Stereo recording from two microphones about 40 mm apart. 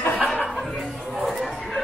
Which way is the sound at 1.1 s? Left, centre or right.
Centre.